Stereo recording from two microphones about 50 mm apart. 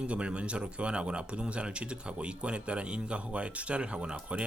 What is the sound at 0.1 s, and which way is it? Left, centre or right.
Speech, right.